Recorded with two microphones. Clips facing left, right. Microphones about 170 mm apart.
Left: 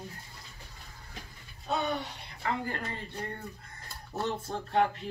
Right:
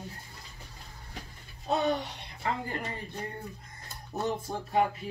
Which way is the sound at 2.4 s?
15° right (ahead or behind).